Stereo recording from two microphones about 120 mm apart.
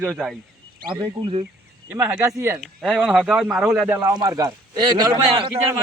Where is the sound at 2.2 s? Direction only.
20° right (ahead or behind).